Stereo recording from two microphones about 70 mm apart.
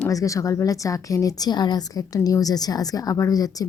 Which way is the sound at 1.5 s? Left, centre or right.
Left.